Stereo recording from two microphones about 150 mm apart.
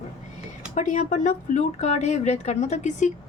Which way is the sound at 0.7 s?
55° left (ahead or behind).